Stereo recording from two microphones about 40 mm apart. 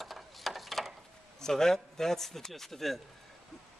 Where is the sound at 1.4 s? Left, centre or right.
Centre.